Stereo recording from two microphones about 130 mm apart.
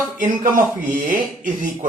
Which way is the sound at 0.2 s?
90° right.